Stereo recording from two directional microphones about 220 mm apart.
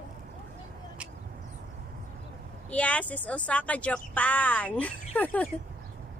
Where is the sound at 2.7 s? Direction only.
5° left (ahead or behind).